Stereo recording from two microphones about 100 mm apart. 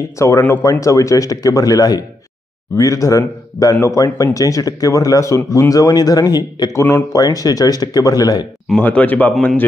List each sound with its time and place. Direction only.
0.2 s a man's voice: 30° left (ahead or behind)
6.8 s speech: 25° left (ahead or behind)
7.2 s a man's voice: 35° left (ahead or behind)
8.7 s speech: 15° left (ahead or behind)